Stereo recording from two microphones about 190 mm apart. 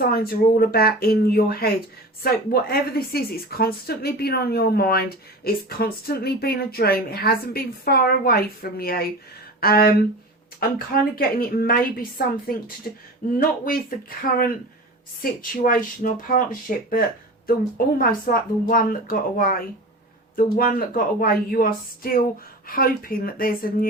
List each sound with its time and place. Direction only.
0.0 s speech: 50° left (ahead or behind)
15.2 s speech: 45° left (ahead or behind)